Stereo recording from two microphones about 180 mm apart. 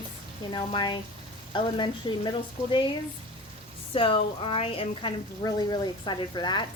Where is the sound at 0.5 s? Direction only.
25° left (ahead or behind).